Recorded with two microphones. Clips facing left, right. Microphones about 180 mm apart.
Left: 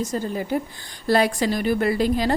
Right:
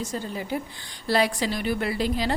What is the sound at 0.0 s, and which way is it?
A woman's voice, 45° left (ahead or behind).